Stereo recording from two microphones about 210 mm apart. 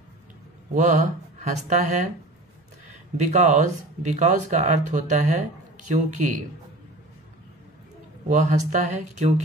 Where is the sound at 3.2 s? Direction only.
35° right (ahead or behind).